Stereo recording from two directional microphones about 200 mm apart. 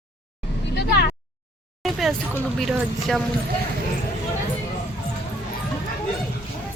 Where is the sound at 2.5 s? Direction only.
Centre (ahead or behind).